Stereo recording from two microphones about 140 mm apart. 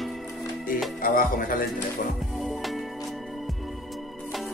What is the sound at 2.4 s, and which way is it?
Music, centre (ahead or behind).